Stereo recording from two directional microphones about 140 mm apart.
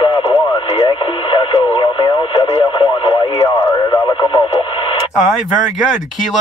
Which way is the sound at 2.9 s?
30° left (ahead or behind).